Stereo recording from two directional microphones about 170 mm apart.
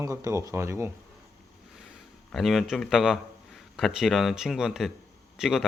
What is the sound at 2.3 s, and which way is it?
Speech, centre (ahead or behind).